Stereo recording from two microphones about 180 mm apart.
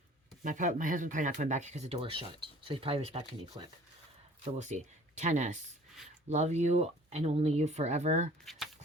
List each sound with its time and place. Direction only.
0.4 s speech: 45° right (ahead or behind); by 3.7 s 25° right (ahead or behind)
4.5 s speech: 40° right (ahead or behind)
8.4 s speech: centre (ahead or behind)